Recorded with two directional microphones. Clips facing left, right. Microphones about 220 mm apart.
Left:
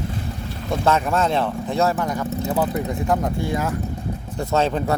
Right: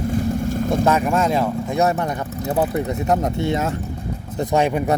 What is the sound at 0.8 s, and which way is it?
Speech, 10° right (ahead or behind).